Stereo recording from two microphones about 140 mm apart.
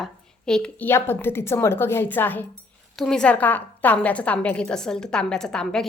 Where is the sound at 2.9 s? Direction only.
5° left (ahead or behind).